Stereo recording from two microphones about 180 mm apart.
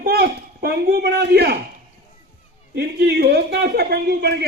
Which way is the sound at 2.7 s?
65° right (ahead or behind).